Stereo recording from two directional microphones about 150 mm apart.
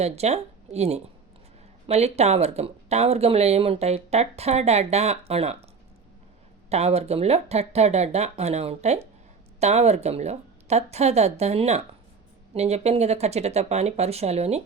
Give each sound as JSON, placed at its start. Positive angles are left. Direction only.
{"t": 0.0, "sound": "speech", "side_deg": -45}
{"t": 6.7, "sound": "speech", "side_deg": -45}